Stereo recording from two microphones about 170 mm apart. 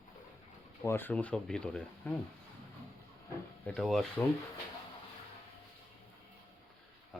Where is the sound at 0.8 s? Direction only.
15° left (ahead or behind).